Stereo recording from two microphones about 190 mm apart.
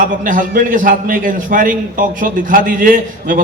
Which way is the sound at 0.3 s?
45° right (ahead or behind).